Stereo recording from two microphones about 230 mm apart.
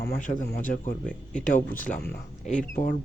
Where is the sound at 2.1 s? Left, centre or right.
Left.